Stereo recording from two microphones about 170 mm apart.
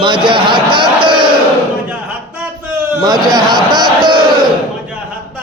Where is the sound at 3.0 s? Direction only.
25° right (ahead or behind).